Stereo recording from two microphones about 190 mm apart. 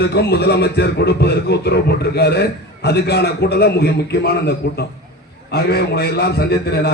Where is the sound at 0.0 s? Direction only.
60° left (ahead or behind).